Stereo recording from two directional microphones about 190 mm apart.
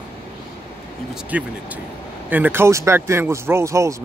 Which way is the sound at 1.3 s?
10° right (ahead or behind).